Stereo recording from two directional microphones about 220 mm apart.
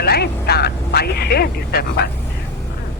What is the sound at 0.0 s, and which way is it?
Speech, 45° left (ahead or behind).